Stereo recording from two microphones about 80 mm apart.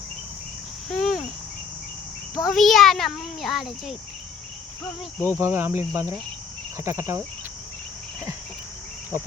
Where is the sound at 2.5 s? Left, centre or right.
Centre.